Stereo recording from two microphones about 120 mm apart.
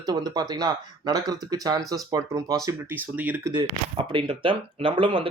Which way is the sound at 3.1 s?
15° right (ahead or behind).